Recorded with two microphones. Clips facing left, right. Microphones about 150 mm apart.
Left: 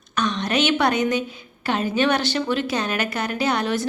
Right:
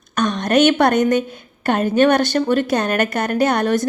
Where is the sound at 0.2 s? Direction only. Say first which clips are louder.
Right 6 dB; 45° right (ahead or behind).